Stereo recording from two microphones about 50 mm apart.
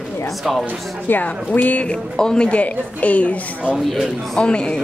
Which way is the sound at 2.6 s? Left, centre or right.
Left.